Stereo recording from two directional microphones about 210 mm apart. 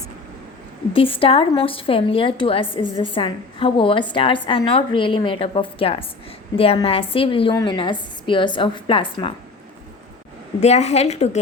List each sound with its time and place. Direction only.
0.9 s a woman's voice: 25° left (ahead or behind)
10.6 s a woman's voice: 30° left (ahead or behind)